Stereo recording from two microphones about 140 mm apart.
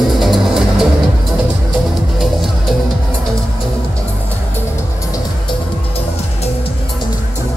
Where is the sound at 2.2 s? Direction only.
Centre (ahead or behind).